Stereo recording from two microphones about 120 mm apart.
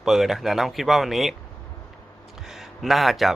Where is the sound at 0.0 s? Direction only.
Centre (ahead or behind).